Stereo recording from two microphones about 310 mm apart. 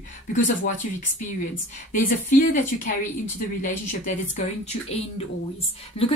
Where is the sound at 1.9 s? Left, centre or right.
Left.